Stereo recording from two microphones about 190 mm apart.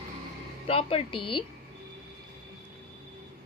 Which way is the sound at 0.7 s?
30° left (ahead or behind).